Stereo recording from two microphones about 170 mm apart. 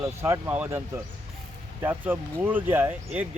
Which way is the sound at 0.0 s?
15° right (ahead or behind).